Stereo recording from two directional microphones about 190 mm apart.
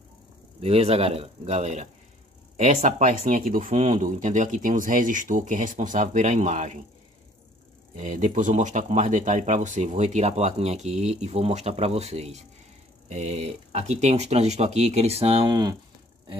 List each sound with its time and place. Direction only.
0.6 s speech: 30° right (ahead or behind)
8.0 s speech: 40° right (ahead or behind)
15.4 s speech: 20° right (ahead or behind)